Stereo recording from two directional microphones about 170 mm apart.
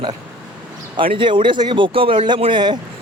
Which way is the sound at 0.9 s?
30° right (ahead or behind).